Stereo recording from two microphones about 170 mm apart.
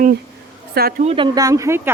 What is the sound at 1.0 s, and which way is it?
Speech, 30° right (ahead or behind).